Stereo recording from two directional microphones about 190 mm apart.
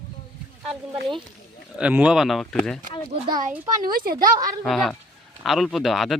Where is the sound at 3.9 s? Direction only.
50° right (ahead or behind).